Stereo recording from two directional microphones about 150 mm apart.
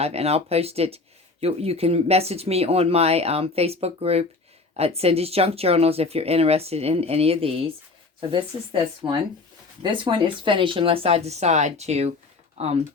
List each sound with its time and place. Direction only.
0.0 s speech: 45° right (ahead or behind)